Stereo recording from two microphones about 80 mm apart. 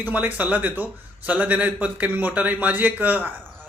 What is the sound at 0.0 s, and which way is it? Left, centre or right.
Speech, right.